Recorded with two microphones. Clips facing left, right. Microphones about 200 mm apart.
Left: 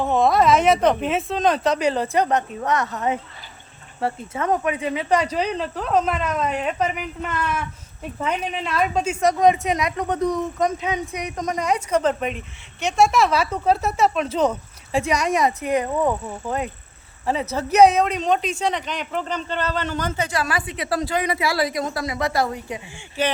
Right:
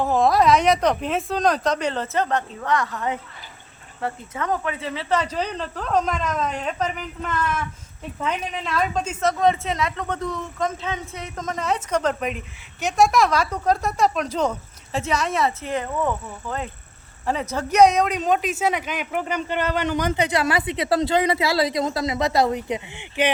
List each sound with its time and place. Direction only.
0.0 s a woman's voice: centre (ahead or behind); by 16.0 s 15° left (ahead or behind)
17.5 s speech: 5° left (ahead or behind); by 23.3 s 20° right (ahead or behind)